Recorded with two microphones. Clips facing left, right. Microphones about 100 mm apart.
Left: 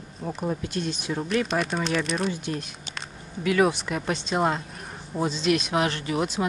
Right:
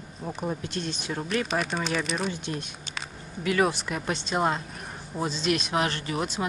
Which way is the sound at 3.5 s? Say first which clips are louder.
Left 3 dB; centre (ahead or behind).